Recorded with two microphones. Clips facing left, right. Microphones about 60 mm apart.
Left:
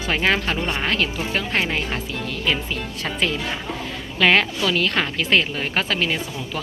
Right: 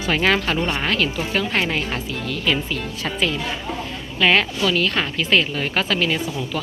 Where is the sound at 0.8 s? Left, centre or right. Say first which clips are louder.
Right 1 dB; left.